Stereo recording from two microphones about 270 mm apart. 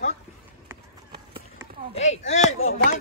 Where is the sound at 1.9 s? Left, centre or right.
Left.